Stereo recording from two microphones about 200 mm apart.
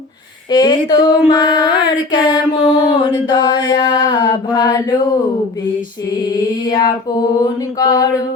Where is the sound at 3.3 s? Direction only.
20° left (ahead or behind).